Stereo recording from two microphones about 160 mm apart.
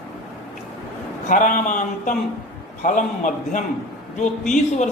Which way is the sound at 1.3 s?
55° left (ahead or behind).